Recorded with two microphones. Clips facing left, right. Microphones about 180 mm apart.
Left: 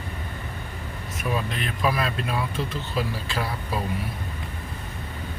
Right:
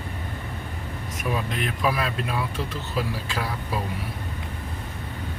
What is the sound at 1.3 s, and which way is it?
Speech, 5° right (ahead or behind).